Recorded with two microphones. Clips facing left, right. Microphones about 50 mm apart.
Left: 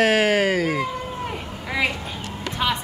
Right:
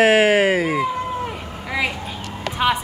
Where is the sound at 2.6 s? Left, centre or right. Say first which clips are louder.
Right 4 dB; centre.